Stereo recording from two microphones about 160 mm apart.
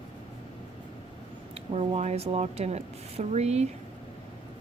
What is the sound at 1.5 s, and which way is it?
Speech, 40° right (ahead or behind).